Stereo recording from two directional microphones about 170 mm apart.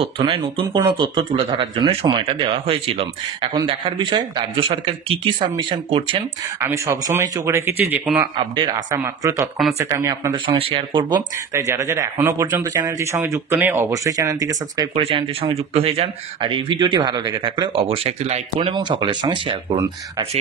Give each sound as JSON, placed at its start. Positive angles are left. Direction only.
{"t": 0.0, "sound": "speech", "side_deg": -30}
{"t": 6.6, "sound": "speech", "side_deg": -15}
{"t": 8.4, "sound": "speech", "side_deg": -30}
{"t": 8.9, "sound": "speech", "side_deg": -20}
{"t": 11.1, "sound": "speech", "side_deg": -15}
{"t": 15.0, "sound": "speech", "side_deg": -35}